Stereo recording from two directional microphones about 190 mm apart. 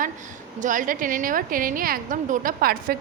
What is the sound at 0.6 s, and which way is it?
A woman's voice, 45° right (ahead or behind).